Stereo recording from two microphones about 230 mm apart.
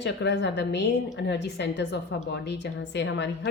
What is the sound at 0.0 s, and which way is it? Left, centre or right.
Speech, left.